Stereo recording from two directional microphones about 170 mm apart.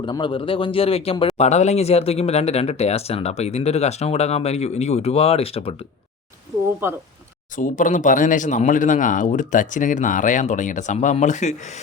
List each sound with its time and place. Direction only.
0.0 s speech: 30° left (ahead or behind)
6.8 s speech: 15° right (ahead or behind)
7.5 s speech: 50° left (ahead or behind)